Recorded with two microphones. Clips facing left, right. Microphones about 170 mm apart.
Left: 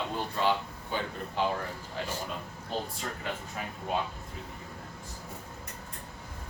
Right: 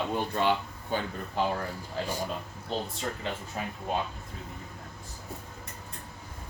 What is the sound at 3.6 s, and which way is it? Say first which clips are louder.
Speech: right 3 dB; 30° right (ahead or behind).